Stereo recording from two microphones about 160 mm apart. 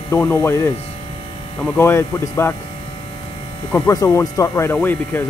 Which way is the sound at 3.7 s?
20° left (ahead or behind).